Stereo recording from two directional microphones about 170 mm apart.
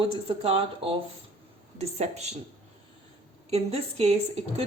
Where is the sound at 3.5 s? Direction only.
35° right (ahead or behind).